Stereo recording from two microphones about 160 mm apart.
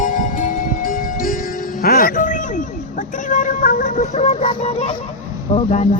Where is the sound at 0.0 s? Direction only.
55° left (ahead or behind).